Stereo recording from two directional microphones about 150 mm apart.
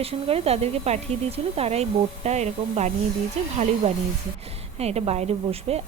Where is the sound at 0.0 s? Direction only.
40° right (ahead or behind).